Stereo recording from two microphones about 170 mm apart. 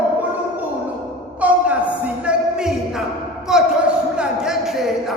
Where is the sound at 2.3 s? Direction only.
5° right (ahead or behind).